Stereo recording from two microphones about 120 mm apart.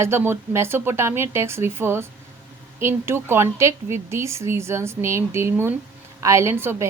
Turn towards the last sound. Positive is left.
turn(degrees=-20)  # may be behind; listen again after turning